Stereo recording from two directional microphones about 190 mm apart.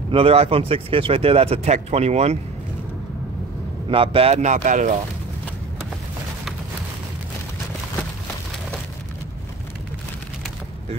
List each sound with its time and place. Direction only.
0.1 s speech: 30° right (ahead or behind)
3.9 s speech: 30° right (ahead or behind)